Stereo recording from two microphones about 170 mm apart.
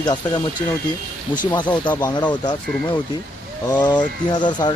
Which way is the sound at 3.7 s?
25° left (ahead or behind).